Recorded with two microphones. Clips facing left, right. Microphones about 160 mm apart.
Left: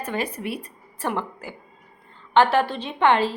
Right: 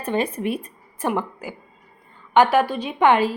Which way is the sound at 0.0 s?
25° right (ahead or behind).